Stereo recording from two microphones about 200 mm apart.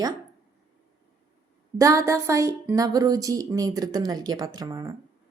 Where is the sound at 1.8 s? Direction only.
15° right (ahead or behind).